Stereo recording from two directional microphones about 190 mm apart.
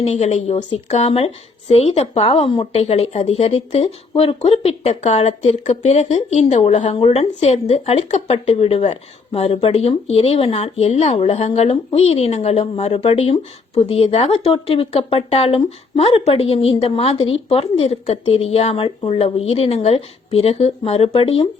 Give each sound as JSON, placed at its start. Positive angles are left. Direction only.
{"t": 0.0, "sound": "speech", "side_deg": 35}